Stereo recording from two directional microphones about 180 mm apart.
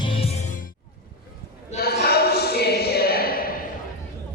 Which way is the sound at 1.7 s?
60° left (ahead or behind).